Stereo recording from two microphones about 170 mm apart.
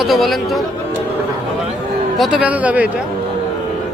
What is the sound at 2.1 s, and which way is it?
Speech, 5° right (ahead or behind).